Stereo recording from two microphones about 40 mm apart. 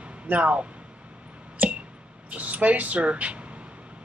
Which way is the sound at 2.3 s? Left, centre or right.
Right.